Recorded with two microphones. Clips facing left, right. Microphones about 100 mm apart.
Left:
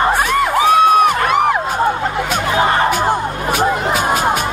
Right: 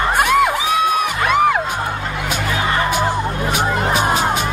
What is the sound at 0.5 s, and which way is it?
Music, 50° left (ahead or behind).